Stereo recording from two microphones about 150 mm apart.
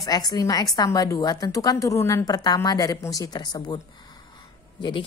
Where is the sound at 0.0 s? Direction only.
25° left (ahead or behind).